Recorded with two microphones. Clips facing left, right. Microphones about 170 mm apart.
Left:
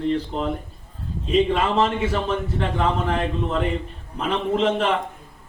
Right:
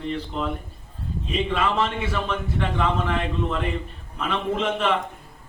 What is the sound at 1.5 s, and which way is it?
A man's voice, 40° left (ahead or behind).